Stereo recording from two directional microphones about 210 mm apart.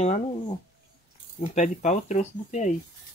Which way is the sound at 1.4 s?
35° left (ahead or behind).